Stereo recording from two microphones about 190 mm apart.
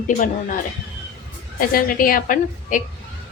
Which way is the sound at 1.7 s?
50° left (ahead or behind).